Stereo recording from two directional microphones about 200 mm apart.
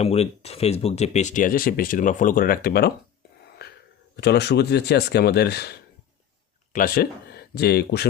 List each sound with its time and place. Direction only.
0.0 s speech: 30° left (ahead or behind); by 2.9 s 50° left (ahead or behind)
4.2 s speech: 55° left (ahead or behind)